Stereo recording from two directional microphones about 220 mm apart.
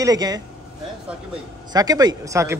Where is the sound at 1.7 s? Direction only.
15° right (ahead or behind).